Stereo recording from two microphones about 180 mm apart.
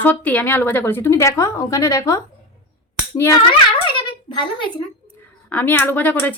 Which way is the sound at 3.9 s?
25° left (ahead or behind).